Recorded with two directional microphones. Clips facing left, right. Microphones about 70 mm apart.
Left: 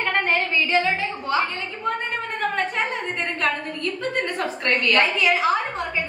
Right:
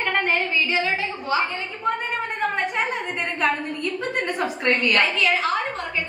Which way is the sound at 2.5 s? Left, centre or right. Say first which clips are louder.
Even; centre.